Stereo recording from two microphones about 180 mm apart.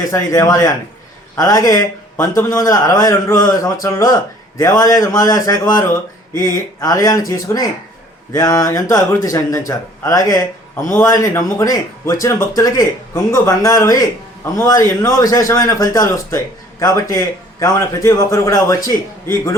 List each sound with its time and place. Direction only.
0.1 s a man's voice: 15° left (ahead or behind)